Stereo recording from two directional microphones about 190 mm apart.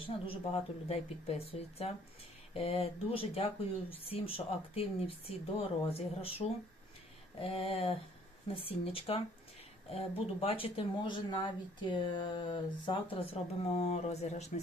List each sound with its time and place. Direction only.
0.3 s speech: 30° left (ahead or behind)
2.5 s speech: 30° left (ahead or behind)